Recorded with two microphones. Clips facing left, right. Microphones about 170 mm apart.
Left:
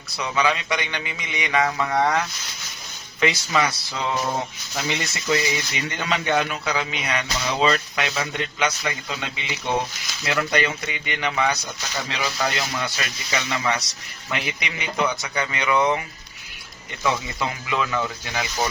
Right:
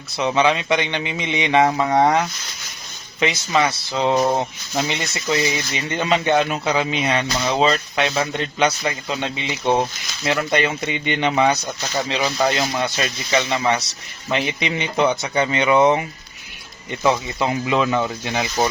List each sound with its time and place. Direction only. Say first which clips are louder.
0.2 s speech: right 5 dB; 25° right (ahead or behind)